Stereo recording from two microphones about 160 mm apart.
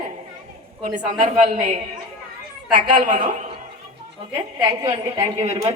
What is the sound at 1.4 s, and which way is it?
A woman's voice, 55° right (ahead or behind).